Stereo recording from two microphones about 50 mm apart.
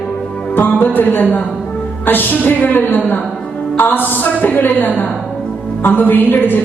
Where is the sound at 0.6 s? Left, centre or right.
Left.